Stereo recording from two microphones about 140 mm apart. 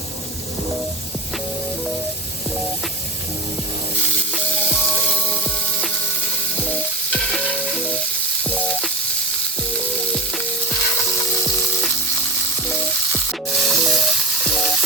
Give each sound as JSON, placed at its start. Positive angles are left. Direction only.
{"t": 4.4, "sound": "sizzle", "side_deg": 10}
{"t": 5.0, "sound": "a sound", "side_deg": 5}
{"t": 6.6, "sound": "sizzle", "side_deg": 10}
{"t": 12.6, "sound": "sizzle", "side_deg": 5}